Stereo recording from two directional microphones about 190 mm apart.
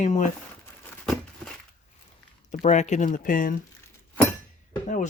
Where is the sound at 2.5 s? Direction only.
40° left (ahead or behind).